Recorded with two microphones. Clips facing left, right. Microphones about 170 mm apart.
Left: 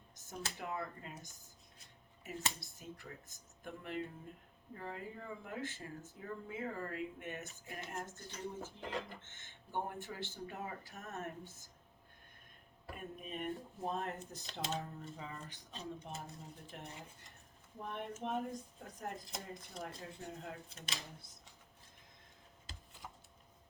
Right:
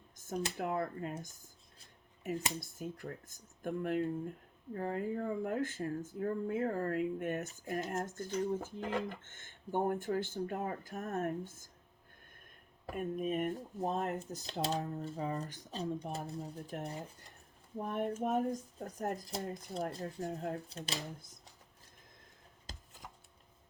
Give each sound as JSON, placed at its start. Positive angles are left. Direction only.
{"t": 0.5, "sound": "speech", "side_deg": -55}
{"t": 2.6, "sound": "speech", "side_deg": -50}
{"t": 12.8, "sound": "speech", "side_deg": -45}
{"t": 22.7, "sound": "a sound", "side_deg": -40}